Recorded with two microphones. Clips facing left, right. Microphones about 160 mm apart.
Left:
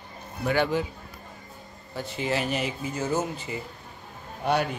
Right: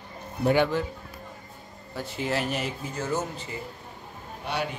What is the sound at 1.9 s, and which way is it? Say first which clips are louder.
A man's voice: left 1 dB; centre (ahead or behind).